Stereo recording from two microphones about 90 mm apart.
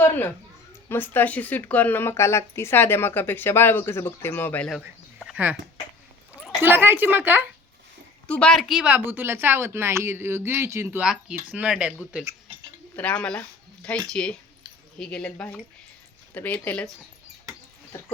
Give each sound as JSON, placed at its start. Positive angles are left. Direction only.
{"t": 0.0, "sound": "a man's voice", "side_deg": 25}
{"t": 6.6, "sound": "speech", "side_deg": -25}
{"t": 8.3, "sound": "speech", "side_deg": 10}
{"t": 8.6, "sound": "speech", "side_deg": 0}
{"t": 8.9, "sound": "speech", "side_deg": -20}
{"t": 11.0, "sound": "speech", "side_deg": -10}
{"t": 13.0, "sound": "speech", "side_deg": 15}